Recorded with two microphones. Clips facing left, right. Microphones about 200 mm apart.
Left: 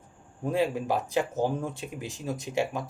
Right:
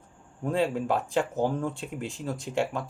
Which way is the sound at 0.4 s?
15° left (ahead or behind).